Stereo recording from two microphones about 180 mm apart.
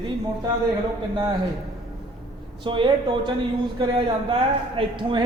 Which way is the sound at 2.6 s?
30° right (ahead or behind).